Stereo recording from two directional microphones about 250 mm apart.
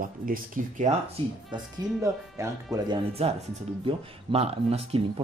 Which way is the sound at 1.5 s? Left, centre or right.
Centre.